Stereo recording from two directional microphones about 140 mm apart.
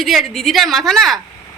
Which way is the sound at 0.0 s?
Centre (ahead or behind).